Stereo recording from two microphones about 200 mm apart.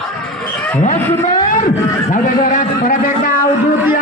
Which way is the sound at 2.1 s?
40° left (ahead or behind).